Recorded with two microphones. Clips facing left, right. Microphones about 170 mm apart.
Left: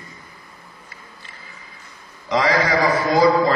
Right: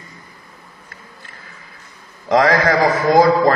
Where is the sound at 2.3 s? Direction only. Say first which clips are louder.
Right 4 dB; 50° right (ahead or behind).